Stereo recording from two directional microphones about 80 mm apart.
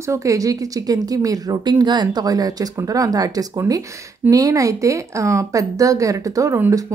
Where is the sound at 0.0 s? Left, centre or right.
Right.